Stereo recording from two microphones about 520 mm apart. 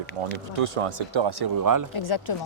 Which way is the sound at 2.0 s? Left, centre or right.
Left.